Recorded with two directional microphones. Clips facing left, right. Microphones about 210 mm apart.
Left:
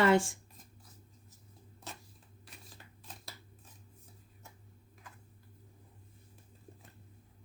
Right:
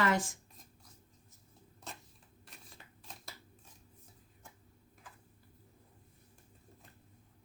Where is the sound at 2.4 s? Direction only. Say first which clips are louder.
Left 1 dB; centre (ahead or behind).